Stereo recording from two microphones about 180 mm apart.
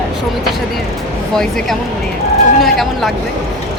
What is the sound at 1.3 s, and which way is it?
Speech, centre (ahead or behind).